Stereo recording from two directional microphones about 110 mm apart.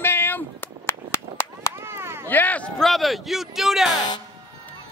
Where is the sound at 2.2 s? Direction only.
15° left (ahead or behind).